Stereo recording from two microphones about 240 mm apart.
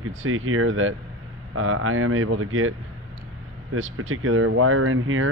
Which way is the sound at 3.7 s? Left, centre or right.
Right.